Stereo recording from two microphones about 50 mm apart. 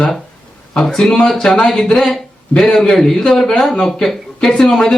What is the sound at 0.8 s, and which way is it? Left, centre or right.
Speech, centre.